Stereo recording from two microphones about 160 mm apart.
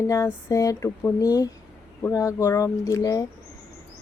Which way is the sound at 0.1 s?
20° left (ahead or behind).